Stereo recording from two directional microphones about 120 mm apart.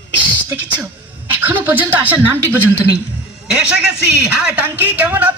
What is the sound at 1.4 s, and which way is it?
Speech, 15° right (ahead or behind).